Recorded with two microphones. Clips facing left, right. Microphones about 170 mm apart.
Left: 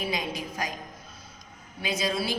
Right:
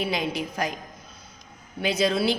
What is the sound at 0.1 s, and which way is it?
Speech, 65° right (ahead or behind).